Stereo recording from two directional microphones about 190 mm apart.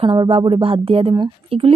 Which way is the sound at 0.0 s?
25° right (ahead or behind).